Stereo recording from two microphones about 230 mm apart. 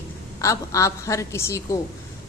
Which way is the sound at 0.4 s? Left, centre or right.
Centre.